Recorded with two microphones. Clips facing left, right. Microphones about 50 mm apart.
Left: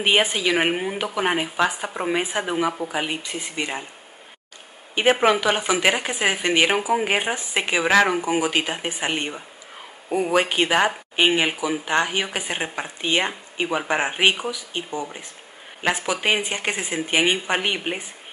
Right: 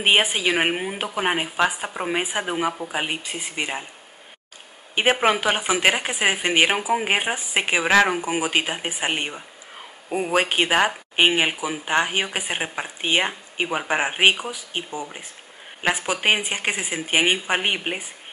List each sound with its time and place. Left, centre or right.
0.0 s a woman's voice: right
0.6 s speech: centre
5.2 s speech: centre
7.8 s speech: centre